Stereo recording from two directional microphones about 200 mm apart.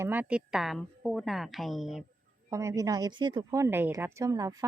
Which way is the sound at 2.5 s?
15° right (ahead or behind).